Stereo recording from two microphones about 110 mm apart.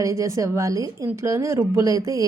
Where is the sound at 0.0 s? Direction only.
30° right (ahead or behind).